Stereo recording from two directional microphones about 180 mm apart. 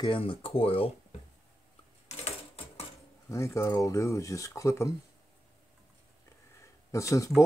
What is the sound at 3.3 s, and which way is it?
Speech, 15° left (ahead or behind).